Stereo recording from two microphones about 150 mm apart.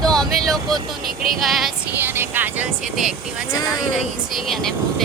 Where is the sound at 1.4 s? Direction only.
Centre (ahead or behind).